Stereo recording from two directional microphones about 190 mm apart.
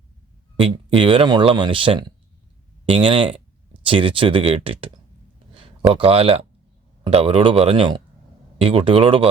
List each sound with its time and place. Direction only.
0.5 s speech: 25° right (ahead or behind)